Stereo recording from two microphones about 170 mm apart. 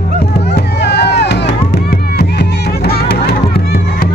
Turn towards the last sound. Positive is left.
turn(degrees=65)  # may be behind; listen again after turning